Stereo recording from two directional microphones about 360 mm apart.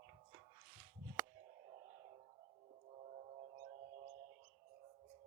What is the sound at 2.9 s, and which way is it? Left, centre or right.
Music, centre.